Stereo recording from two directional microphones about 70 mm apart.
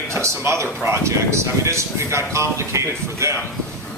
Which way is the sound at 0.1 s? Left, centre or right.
Right.